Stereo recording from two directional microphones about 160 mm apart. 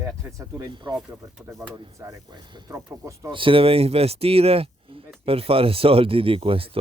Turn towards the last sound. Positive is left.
turn(degrees=-35)  # may be behind; listen again after turning